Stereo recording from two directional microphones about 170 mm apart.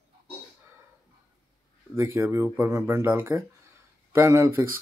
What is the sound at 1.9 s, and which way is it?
Speech, 10° right (ahead or behind).